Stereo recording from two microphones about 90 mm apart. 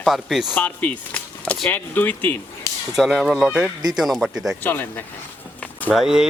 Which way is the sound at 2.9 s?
Centre (ahead or behind).